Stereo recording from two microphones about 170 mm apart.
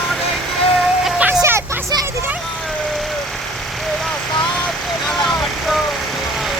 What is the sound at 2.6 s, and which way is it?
Vehicle, centre (ahead or behind).